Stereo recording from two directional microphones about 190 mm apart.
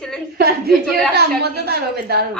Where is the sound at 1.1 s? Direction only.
60° right (ahead or behind).